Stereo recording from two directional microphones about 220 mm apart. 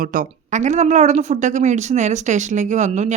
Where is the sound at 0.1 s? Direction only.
35° right (ahead or behind).